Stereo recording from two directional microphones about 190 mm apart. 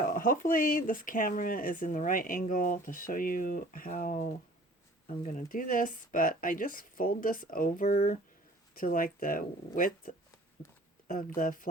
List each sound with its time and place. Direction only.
0.0 s speech: 45° left (ahead or behind)
11.3 s speech: 45° left (ahead or behind)